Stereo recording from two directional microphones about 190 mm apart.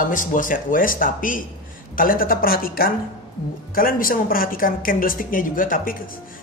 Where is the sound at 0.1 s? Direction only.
45° left (ahead or behind).